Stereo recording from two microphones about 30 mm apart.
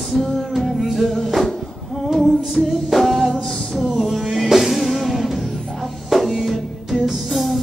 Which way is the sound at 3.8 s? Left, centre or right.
Centre.